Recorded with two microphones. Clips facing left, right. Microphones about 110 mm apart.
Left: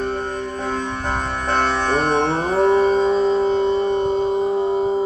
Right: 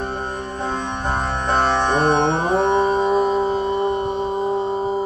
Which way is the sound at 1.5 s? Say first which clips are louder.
Right 1 dB; 20° right (ahead or behind).